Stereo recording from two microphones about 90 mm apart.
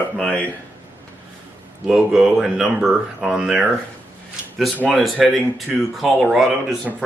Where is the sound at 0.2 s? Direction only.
15° left (ahead or behind).